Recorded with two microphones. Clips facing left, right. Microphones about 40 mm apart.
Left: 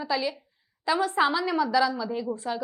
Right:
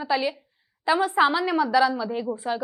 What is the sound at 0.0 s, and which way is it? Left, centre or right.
A woman's voice, right.